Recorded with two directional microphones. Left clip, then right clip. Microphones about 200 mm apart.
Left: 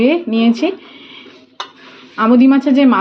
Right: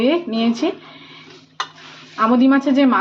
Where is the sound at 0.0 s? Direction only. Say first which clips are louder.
Left 4 dB; 30° left (ahead or behind).